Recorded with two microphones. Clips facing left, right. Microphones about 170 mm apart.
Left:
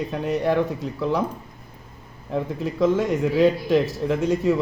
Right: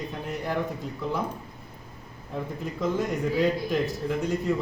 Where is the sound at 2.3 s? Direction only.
90° left.